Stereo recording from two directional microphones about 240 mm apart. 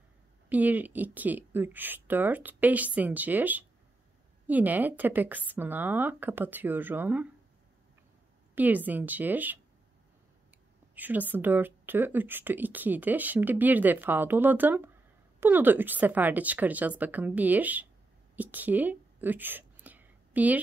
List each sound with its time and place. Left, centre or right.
0.5 s a woman's voice: centre
8.5 s a woman's voice: centre
11.0 s a woman's voice: centre
18.3 s whispering: centre